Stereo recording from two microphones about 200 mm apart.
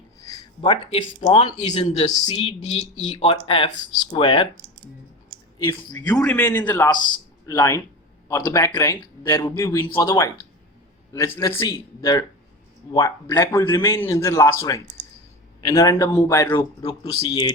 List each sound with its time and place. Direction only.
0.6 s speech: 25° left (ahead or behind)
5.6 s a man's voice: 15° left (ahead or behind)